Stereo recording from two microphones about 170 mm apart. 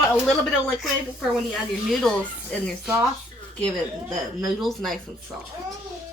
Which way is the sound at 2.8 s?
10° right (ahead or behind).